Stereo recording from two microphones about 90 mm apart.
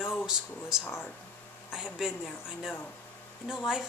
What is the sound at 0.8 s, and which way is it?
Speech, 25° left (ahead or behind).